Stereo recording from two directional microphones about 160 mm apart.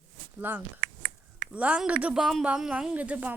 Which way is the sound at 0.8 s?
65° right (ahead or behind).